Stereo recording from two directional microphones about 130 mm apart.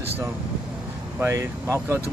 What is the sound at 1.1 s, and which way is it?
Speech, 20° right (ahead or behind).